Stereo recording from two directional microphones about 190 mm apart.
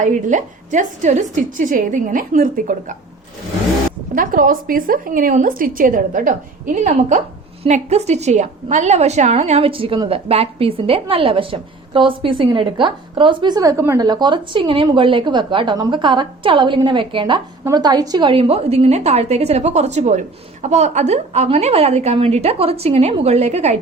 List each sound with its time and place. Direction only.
0.0 s a woman's voice: 40° right (ahead or behind)
4.1 s a woman's voice: 45° right (ahead or behind)